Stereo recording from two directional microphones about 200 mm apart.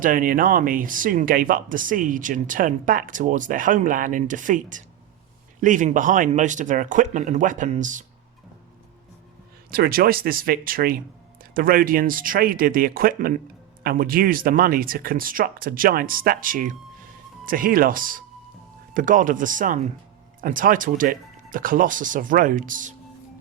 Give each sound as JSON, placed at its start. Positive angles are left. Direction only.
{"t": 0.0, "sound": "speech", "side_deg": -45}
{"t": 9.6, "sound": "speech", "side_deg": -50}